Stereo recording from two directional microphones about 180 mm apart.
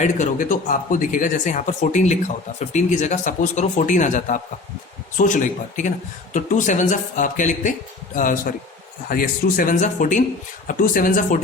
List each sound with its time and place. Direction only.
0.0 s speech: 45° left (ahead or behind)